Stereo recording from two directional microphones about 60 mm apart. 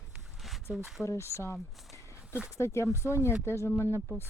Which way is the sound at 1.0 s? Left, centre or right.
Left.